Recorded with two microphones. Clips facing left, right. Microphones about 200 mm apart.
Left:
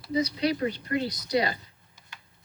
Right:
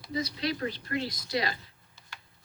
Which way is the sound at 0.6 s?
20° left (ahead or behind).